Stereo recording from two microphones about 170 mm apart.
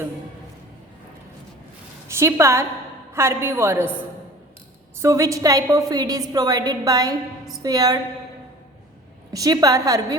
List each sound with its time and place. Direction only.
2.0 s a woman's voice: 15° right (ahead or behind)
4.9 s a woman's voice: 15° right (ahead or behind)
9.3 s a woman's voice: 20° right (ahead or behind)